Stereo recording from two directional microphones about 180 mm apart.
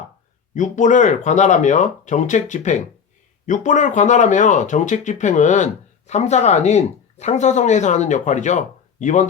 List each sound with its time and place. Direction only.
0.5 s speech: 45° left (ahead or behind)